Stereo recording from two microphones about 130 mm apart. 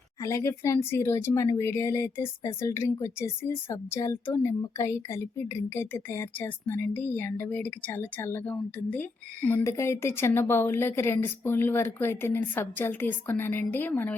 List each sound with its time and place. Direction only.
0.2 s speech: 20° left (ahead or behind)